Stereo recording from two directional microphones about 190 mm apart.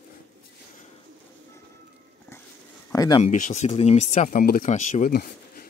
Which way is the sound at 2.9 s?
20° left (ahead or behind).